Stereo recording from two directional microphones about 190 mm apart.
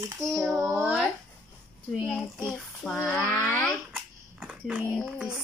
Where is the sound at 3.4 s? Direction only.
10° left (ahead or behind).